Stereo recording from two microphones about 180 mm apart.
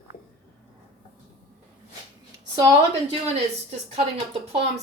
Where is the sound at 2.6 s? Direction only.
30° right (ahead or behind).